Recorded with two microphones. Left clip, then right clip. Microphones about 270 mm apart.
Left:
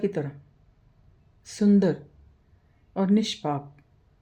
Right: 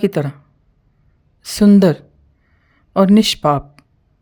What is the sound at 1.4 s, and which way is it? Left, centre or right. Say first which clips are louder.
Speech: right 11 dB; right.